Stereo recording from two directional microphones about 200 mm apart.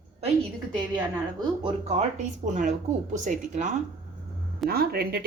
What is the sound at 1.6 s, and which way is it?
Speech, 35° right (ahead or behind).